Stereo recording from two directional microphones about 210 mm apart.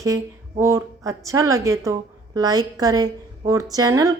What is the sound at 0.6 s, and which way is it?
A woman's voice, 15° right (ahead or behind).